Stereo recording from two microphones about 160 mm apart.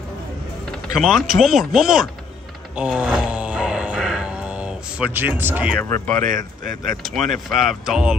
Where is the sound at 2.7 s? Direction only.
5° right (ahead or behind).